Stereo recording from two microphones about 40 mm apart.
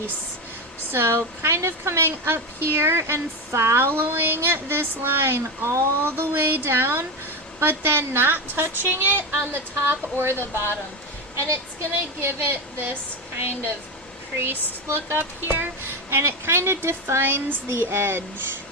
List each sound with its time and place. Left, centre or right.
0.9 s a woman's voice: right
10.3 s speech: left
11.8 s a woman's voice: right
14.3 s speech: right